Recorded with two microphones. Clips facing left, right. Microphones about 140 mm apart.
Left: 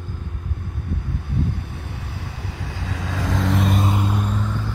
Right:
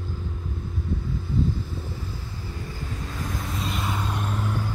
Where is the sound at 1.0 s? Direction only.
60° left (ahead or behind).